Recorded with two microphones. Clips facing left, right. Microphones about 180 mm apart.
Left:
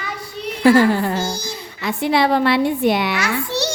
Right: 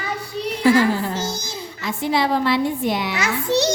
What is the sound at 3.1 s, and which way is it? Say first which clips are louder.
Speech: right 2 dB; 20° right (ahead or behind).